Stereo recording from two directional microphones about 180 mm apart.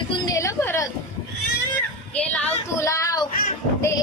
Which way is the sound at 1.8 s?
10° left (ahead or behind).